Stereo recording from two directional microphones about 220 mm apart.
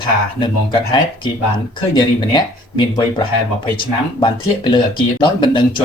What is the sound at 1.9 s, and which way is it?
Speech, 20° left (ahead or behind).